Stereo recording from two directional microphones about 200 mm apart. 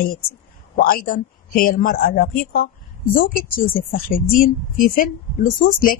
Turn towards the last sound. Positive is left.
turn(degrees=45)  # may be behind; listen again after turning